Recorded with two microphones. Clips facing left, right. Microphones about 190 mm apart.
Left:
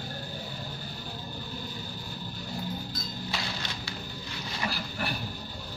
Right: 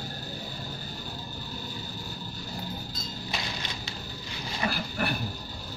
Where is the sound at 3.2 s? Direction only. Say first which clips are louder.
Right 1 dB; 20° right (ahead or behind).